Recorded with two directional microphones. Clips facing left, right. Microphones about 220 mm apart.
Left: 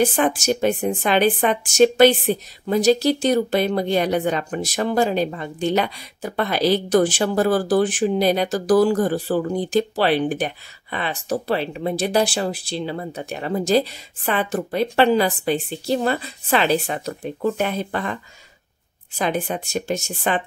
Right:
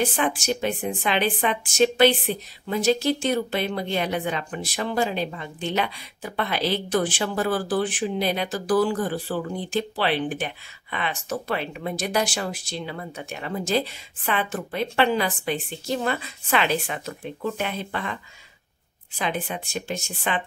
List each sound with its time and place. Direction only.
0.0 s a woman's voice: 45° left (ahead or behind)